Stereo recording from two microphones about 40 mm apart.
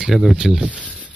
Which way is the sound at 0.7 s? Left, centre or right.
Left.